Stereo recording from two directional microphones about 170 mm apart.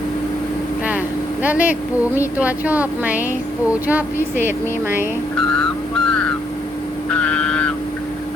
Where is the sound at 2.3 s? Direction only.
10° right (ahead or behind).